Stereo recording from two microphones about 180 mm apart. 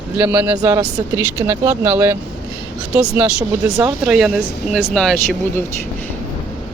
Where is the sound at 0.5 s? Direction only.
20° right (ahead or behind); by 5.1 s 5° left (ahead or behind).